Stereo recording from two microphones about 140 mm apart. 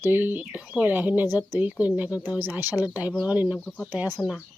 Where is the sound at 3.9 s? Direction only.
10° right (ahead or behind).